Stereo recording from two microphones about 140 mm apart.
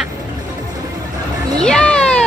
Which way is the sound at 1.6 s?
5° left (ahead or behind).